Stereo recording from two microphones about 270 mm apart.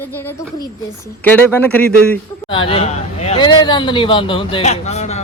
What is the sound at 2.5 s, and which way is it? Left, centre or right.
Speech, centre.